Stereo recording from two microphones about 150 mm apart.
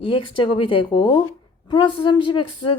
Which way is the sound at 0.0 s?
35° left (ahead or behind).